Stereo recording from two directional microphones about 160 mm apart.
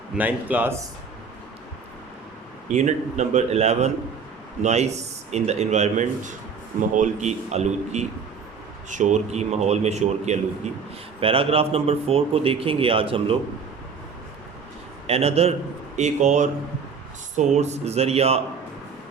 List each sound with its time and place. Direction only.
0.2 s speech: 10° right (ahead or behind)
2.6 s a man's voice: 45° right (ahead or behind)
15.0 s a man's voice: 40° right (ahead or behind)